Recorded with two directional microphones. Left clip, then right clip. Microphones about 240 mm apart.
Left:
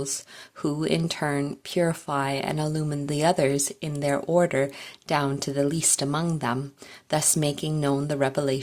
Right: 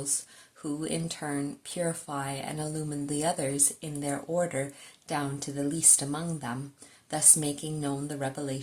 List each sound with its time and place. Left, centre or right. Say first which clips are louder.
0.6 s speech: left 8 dB; left